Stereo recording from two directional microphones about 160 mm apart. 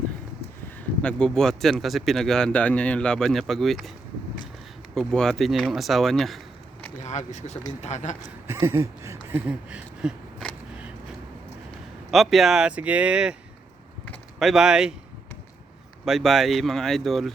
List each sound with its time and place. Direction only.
1.0 s speech: 5° left (ahead or behind)
4.9 s speech: 5° left (ahead or behind)
7.0 s a man's voice: 45° left (ahead or behind)
8.4 s a sound: 15° right (ahead or behind)
12.1 s speech: centre (ahead or behind)
14.3 s speech: centre (ahead or behind)
16.0 s speech: centre (ahead or behind)